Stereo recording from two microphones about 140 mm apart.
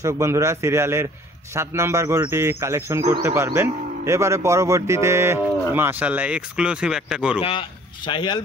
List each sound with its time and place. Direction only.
0.0 s speech: 20° right (ahead or behind)
7.3 s speech: 40° left (ahead or behind)